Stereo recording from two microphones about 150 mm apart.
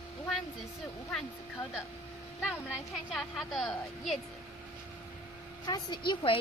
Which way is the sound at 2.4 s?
5° right (ahead or behind).